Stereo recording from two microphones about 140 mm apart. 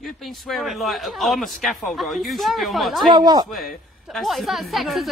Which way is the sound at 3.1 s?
30° right (ahead or behind).